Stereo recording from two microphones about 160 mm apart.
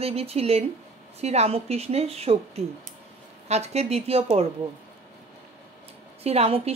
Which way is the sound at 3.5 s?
40° right (ahead or behind).